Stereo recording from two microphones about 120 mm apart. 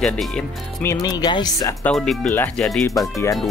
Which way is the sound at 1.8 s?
5° left (ahead or behind).